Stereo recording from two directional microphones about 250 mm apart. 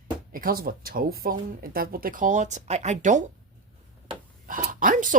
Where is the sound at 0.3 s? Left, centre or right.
Right.